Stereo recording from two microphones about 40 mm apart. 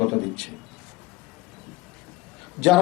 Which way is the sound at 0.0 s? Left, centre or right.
Centre.